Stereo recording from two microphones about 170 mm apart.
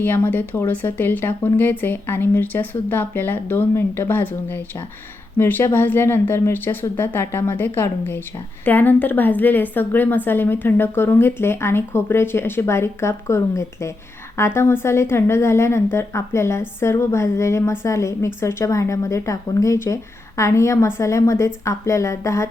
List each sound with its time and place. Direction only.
0.0 s a woman's voice: 10° left (ahead or behind)